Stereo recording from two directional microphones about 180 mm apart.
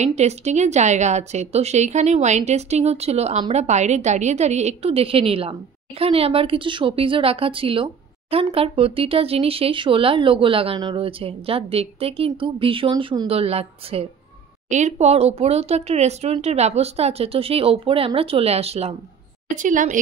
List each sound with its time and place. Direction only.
0.0 s a woman's voice: 40° right (ahead or behind)
19.5 s a woman's voice: 45° right (ahead or behind)